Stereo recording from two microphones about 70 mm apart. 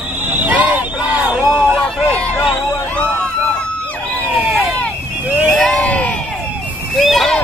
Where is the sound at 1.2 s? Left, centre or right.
Centre.